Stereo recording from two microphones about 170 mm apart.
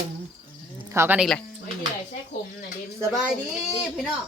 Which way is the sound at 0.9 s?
15° right (ahead or behind).